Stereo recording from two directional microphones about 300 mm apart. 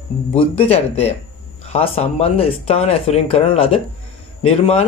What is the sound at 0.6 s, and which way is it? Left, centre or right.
Speech, centre.